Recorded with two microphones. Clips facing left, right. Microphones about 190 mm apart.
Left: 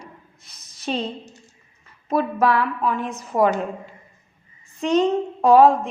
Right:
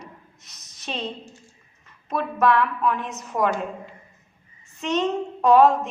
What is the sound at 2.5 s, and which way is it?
A woman's voice, 35° left (ahead or behind).